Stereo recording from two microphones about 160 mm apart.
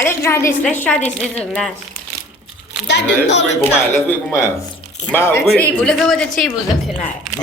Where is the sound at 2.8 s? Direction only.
90° left.